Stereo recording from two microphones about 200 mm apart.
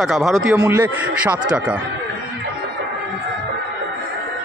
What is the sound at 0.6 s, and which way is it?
Speech, 15° right (ahead or behind).